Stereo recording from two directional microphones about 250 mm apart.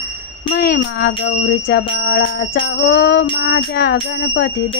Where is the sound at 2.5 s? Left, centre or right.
Left.